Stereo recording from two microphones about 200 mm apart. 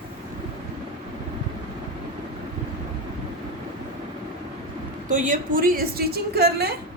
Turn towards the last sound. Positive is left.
turn(degrees=-55)  # may be behind; listen again after turning